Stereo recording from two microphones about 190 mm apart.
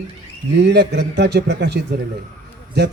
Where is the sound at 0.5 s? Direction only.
65° right (ahead or behind).